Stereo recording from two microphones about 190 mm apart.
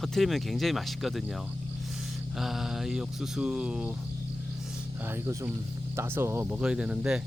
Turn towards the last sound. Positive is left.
turn(degrees=-5)  # may be behind; listen again after turning